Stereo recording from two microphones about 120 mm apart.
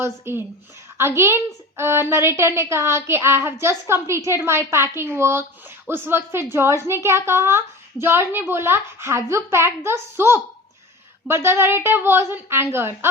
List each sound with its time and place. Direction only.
0.0 s a woman's voice: 20° right (ahead or behind)